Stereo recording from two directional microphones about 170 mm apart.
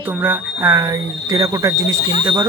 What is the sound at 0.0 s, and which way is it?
A man's voice, 10° right (ahead or behind).